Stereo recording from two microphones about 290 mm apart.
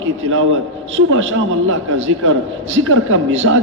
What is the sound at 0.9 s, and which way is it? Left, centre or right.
A man's voice, right.